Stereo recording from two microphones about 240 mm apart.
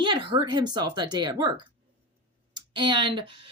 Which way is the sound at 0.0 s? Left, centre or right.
Centre.